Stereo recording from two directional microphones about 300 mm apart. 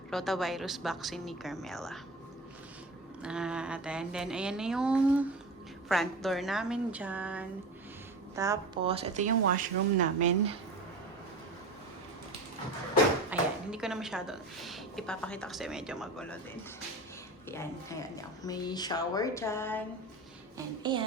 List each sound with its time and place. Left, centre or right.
0.1 s a woman's voice: centre
3.2 s a woman's voice: centre; by 10.6 s right
13.3 s a sound: centre
13.7 s a woman's voice: centre
17.5 s speech: centre